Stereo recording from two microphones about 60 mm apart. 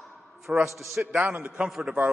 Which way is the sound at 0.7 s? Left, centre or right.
Centre.